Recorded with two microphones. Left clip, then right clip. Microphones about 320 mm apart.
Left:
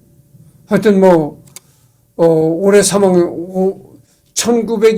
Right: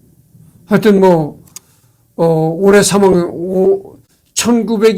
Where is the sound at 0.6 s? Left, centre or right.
Right.